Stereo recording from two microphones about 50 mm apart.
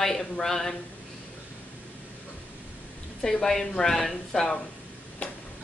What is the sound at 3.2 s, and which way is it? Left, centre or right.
A woman's voice, centre.